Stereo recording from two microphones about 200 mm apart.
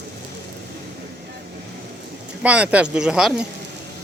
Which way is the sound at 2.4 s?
5° right (ahead or behind).